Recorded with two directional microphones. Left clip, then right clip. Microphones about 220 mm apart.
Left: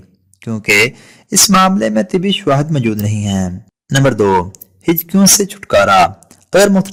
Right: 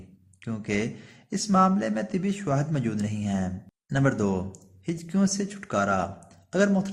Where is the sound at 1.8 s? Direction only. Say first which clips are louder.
Left 14 dB; 45° left (ahead or behind).